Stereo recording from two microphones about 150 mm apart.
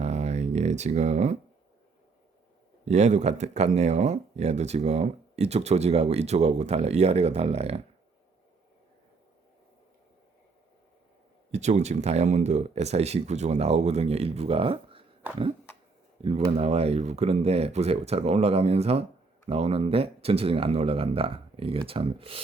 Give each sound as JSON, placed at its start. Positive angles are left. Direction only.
{"t": 0.0, "sound": "a sound", "side_deg": -45}
{"t": 2.8, "sound": "speech", "side_deg": -50}
{"t": 11.5, "sound": "speech", "side_deg": -50}
{"t": 16.2, "sound": "speech", "side_deg": -40}